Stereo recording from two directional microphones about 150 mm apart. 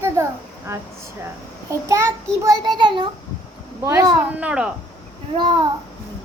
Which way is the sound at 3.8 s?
20° right (ahead or behind).